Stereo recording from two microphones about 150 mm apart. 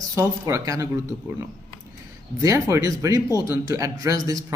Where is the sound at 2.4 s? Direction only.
20° right (ahead or behind).